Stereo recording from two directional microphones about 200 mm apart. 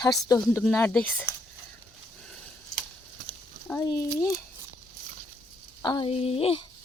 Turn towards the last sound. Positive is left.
turn(degrees=30)  # may be behind; listen again after turning